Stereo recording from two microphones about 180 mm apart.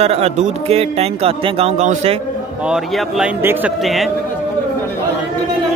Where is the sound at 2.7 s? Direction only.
10° right (ahead or behind).